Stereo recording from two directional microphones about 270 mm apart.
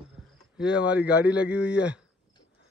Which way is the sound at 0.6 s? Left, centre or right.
Centre.